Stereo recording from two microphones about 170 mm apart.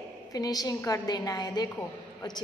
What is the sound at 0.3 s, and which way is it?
A woman's voice, 20° left (ahead or behind).